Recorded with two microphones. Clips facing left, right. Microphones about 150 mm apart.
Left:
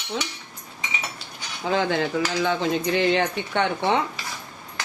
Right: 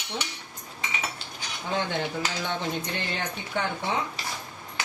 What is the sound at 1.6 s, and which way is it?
Speech, 90° left.